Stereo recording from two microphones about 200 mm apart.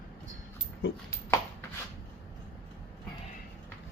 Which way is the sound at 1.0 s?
15° left (ahead or behind).